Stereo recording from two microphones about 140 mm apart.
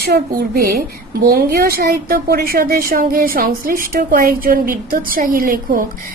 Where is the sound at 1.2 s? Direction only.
90° right.